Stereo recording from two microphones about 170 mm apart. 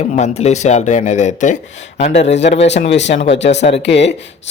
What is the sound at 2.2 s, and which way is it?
Speech, 90° left.